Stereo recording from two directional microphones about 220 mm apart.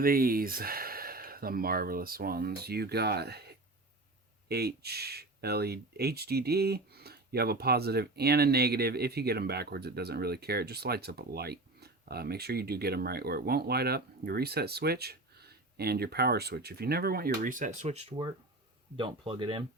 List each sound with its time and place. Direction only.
0.0 s speech: 40° right (ahead or behind); by 19.6 s 25° right (ahead or behind)